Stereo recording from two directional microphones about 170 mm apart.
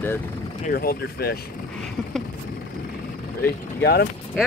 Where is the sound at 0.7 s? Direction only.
65° left (ahead or behind).